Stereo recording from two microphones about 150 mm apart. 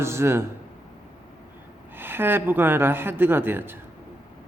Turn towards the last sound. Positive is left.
turn(degrees=-15)  # may be behind; listen again after turning